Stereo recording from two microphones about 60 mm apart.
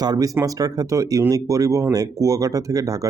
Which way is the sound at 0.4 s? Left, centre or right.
Right.